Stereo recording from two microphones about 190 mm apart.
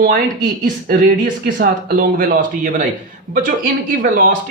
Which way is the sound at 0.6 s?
45° right (ahead or behind).